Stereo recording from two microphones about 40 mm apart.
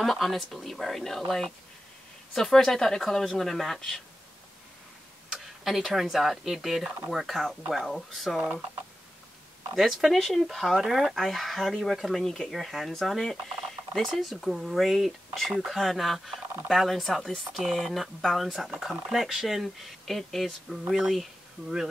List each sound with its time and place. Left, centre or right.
0.0 s speech: centre
5.3 s speech: centre
9.8 s speech: centre
12.2 s speech: centre
12.4 s speech: centre